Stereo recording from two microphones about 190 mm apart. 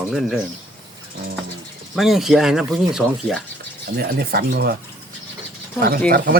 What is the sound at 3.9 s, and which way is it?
Speech, 55° right (ahead or behind).